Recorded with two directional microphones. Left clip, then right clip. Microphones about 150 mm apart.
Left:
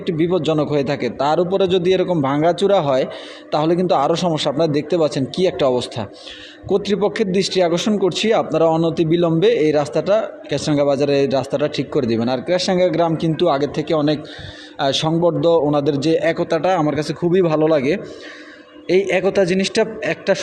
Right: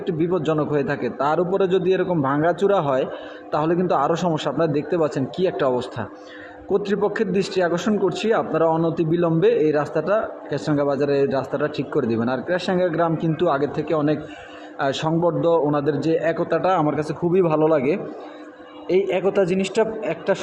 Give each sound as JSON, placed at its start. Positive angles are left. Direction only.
{"t": 0.0, "sound": "a man's voice", "side_deg": 30}